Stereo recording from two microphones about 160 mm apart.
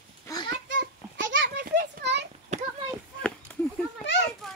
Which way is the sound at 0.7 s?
90° right.